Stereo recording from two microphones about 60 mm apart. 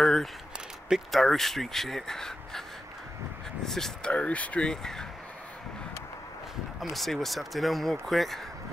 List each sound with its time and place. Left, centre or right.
0.0 s a sound: centre
1.1 s speech: centre
3.6 s speech: centre
4.1 s speech: left
4.6 s speech: centre
6.8 s speech: centre